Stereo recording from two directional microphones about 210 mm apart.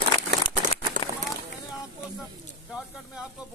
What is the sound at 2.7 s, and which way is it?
Speech, centre (ahead or behind).